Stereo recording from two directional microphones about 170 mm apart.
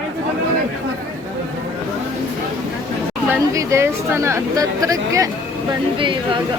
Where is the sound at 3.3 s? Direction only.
15° right (ahead or behind).